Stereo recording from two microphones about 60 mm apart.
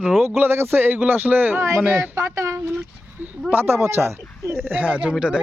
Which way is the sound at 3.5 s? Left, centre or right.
Right.